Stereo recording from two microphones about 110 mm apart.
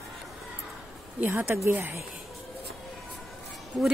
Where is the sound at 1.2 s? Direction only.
20° right (ahead or behind).